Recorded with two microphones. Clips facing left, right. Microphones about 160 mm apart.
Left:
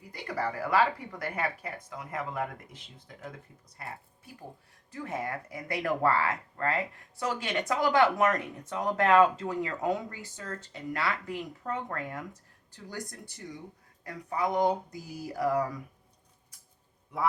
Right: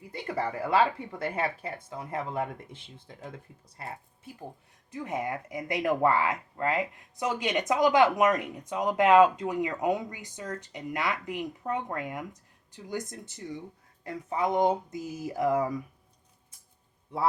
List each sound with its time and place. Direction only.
0.1 s speech: 25° right (ahead or behind)
4.9 s speech: 20° right (ahead or behind)